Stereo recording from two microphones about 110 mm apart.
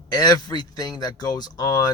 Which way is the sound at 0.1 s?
35° left (ahead or behind).